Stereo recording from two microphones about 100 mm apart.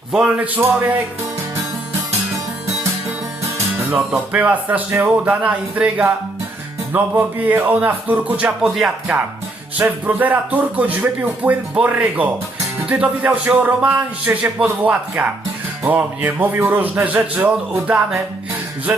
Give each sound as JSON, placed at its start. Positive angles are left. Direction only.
{"t": 0.1, "sound": "speech", "side_deg": -10}
{"t": 4.3, "sound": "speech", "side_deg": -15}
{"t": 8.7, "sound": "music", "side_deg": -5}
{"t": 9.7, "sound": "speech", "side_deg": -15}